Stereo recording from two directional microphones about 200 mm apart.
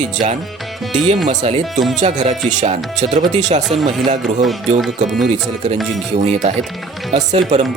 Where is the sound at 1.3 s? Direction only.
35° right (ahead or behind).